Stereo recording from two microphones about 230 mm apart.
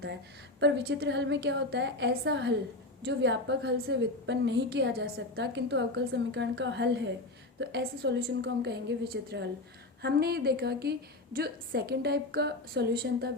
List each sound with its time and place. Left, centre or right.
0.6 s a woman's voice: right